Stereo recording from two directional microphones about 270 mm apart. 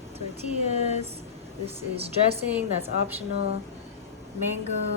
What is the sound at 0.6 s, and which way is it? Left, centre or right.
Speech, left.